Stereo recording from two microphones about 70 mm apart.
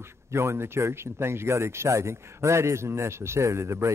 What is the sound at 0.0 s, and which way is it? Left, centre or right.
Speech, right.